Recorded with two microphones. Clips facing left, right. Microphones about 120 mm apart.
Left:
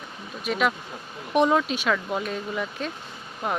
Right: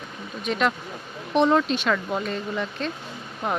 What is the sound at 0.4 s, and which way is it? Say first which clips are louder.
Speech: right 1 dB; 5° left (ahead or behind).